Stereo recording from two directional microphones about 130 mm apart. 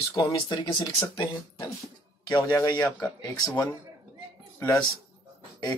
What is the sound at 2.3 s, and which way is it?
Speech, 25° left (ahead or behind).